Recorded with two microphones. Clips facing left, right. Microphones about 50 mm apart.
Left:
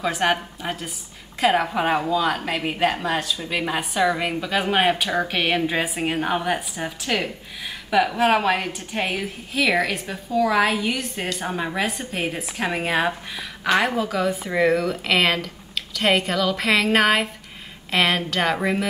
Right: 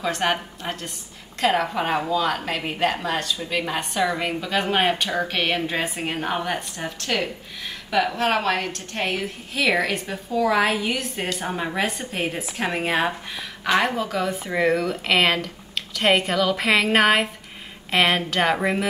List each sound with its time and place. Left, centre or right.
0.0 s a woman's voice: centre